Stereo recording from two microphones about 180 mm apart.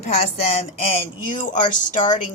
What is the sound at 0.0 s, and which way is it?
A woman's voice, 35° left (ahead or behind).